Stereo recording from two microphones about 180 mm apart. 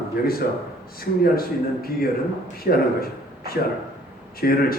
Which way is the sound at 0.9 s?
55° left (ahead or behind).